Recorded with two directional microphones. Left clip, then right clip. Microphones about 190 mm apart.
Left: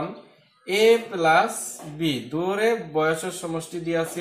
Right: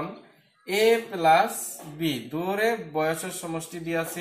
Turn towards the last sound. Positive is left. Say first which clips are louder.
# left 4 dB
turn(degrees=10)  # may be behind; listen again after turning